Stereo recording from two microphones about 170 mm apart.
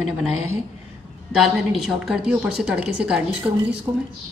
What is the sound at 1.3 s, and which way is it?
A woman's voice, centre (ahead or behind).